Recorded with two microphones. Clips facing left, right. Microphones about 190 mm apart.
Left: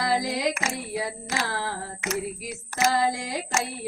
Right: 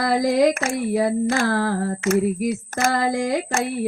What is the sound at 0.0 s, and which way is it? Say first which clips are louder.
Music: right 8 dB; 50° right (ahead or behind).